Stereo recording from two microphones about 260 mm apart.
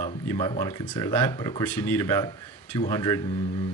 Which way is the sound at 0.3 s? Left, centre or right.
Centre.